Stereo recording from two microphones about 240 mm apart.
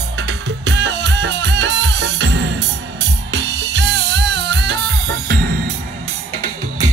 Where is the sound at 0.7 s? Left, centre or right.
Right.